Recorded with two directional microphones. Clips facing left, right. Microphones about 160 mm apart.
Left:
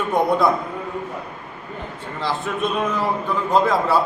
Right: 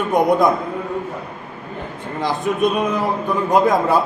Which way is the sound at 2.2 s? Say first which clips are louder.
Right 5 dB; 15° right (ahead or behind).